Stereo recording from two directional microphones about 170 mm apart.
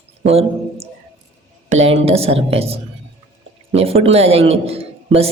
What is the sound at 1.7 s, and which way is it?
A woman's voice, 35° right (ahead or behind).